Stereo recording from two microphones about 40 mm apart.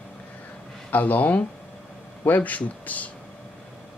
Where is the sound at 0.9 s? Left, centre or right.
Left.